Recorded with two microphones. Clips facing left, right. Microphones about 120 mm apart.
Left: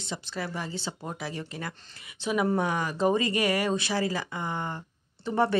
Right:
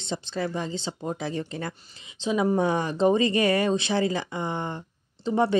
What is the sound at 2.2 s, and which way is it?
Speech, 20° right (ahead or behind).